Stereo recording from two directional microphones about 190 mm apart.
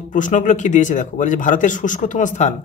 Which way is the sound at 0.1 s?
40° left (ahead or behind).